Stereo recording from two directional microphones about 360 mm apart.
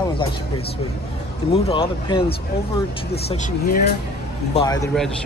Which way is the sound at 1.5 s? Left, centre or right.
Centre.